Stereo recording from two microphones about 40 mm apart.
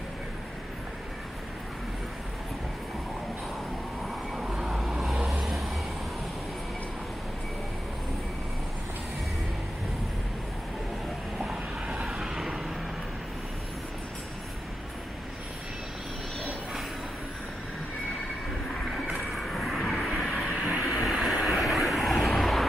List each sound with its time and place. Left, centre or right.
4.4 s vehicle: centre
5.4 s vehicle: centre
12.1 s vehicle: centre
19.3 s vehicle: centre
20.5 s vehicle: right
20.8 s vehicle: centre